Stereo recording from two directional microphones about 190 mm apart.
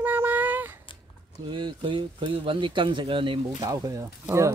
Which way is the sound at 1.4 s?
25° right (ahead or behind).